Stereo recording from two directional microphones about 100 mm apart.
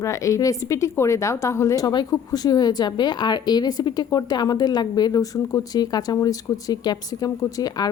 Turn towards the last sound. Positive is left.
turn(degrees=40)  # may be behind; listen again after turning